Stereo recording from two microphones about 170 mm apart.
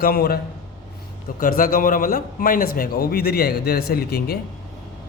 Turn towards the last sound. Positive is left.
turn(degrees=65)  # may be behind; listen again after turning